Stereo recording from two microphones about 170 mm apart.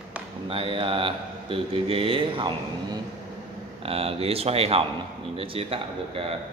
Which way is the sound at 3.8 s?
35° right (ahead or behind).